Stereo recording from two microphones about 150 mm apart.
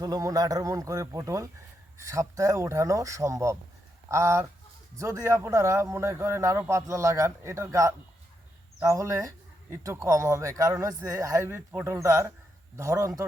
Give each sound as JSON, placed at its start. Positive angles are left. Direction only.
{"t": 0.0, "sound": "speech", "side_deg": -25}